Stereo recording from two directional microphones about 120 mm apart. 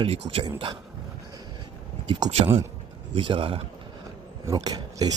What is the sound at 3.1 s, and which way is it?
Speech, 45° right (ahead or behind).